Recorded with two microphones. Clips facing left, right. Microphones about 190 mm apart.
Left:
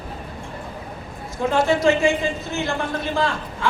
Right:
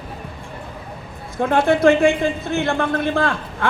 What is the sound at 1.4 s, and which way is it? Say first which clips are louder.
A man's voice: right 3 dB; 55° right (ahead or behind).